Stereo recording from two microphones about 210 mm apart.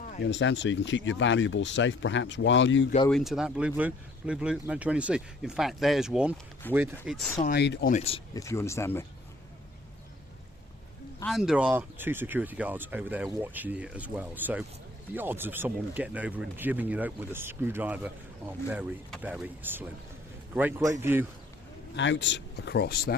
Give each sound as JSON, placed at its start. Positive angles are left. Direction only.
{"t": 0.3, "sound": "speech", "side_deg": 60}
{"t": 3.1, "sound": "speech", "side_deg": 0}
{"t": 7.3, "sound": "speech", "side_deg": 45}
{"t": 7.9, "sound": "speech", "side_deg": 30}
{"t": 8.3, "sound": "speech", "side_deg": 15}
{"t": 11.2, "sound": "speech", "side_deg": 0}
{"t": 21.9, "sound": "speech", "side_deg": 60}